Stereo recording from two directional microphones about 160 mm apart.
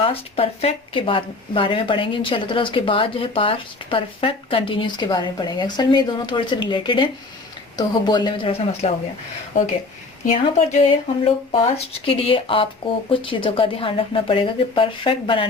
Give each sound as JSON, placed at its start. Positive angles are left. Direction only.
{"t": 0.0, "sound": "speech", "side_deg": 35}
{"t": 10.7, "sound": "speech", "side_deg": 45}
{"t": 11.5, "sound": "speech", "side_deg": 35}